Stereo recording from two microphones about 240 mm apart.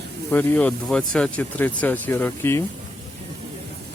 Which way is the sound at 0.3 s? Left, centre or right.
Centre.